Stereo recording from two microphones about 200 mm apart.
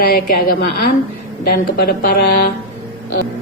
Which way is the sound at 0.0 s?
50° left (ahead or behind).